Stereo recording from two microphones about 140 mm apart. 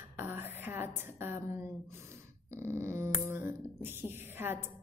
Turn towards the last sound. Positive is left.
turn(degrees=-15)  # may be behind; listen again after turning